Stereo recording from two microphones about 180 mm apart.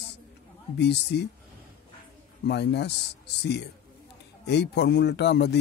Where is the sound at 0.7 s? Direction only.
70° left (ahead or behind).